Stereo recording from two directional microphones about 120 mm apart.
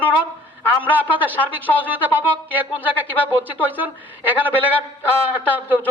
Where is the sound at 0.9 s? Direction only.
15° right (ahead or behind).